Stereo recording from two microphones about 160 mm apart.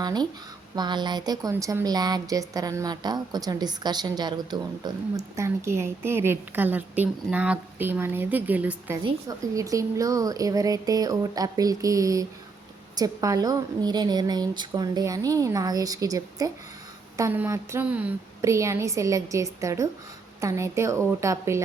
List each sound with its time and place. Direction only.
0.0 s speech: 25° right (ahead or behind)
9.2 s speech: 20° right (ahead or behind)